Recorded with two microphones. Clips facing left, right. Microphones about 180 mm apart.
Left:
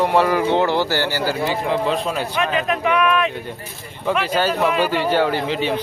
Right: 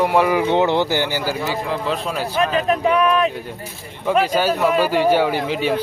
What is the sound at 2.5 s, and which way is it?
Speech, 35° right (ahead or behind).